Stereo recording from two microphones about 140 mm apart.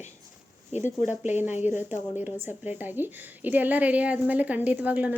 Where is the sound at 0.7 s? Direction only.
55° left (ahead or behind).